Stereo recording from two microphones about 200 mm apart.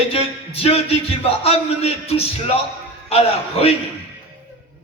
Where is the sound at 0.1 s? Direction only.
30° left (ahead or behind).